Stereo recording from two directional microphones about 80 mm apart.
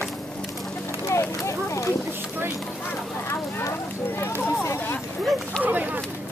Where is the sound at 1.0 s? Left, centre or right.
Left.